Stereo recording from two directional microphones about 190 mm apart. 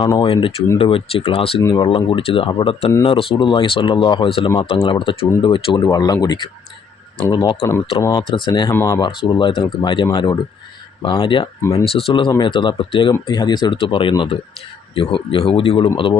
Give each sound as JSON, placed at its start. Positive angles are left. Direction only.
{"t": 0.1, "sound": "speech", "side_deg": 25}
{"t": 8.7, "sound": "speech", "side_deg": 15}
{"t": 9.0, "sound": "speech", "side_deg": 25}